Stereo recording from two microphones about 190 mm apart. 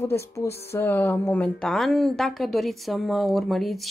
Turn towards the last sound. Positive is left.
turn(degrees=0)  # may be behind; listen again after turning